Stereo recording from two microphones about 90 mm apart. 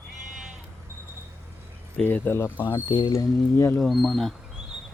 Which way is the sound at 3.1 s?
30° left (ahead or behind).